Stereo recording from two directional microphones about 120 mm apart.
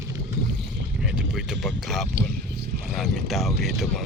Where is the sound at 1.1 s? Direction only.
Centre (ahead or behind).